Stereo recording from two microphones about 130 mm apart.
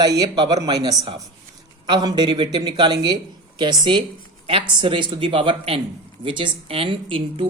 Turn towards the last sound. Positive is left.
turn(degrees=-45)  # may be behind; listen again after turning